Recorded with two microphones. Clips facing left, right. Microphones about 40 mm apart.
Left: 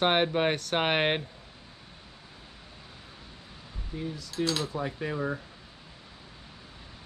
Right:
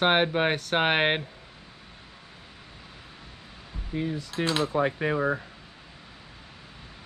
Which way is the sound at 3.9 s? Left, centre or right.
Right.